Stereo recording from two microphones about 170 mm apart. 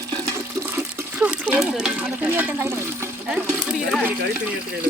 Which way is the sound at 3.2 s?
5° right (ahead or behind).